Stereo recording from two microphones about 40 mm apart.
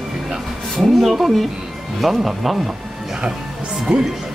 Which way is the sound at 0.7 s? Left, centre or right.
Centre.